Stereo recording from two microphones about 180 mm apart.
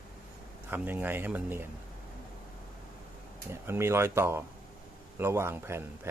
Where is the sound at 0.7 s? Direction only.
10° right (ahead or behind).